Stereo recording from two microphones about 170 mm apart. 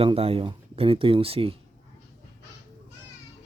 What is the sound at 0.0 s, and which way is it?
Speech, 35° right (ahead or behind).